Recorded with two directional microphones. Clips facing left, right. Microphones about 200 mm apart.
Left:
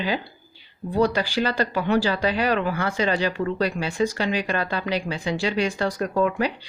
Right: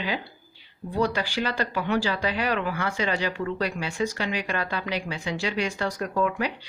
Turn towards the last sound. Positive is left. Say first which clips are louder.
# left 4 dB
turn(degrees=35)  # may be behind; listen again after turning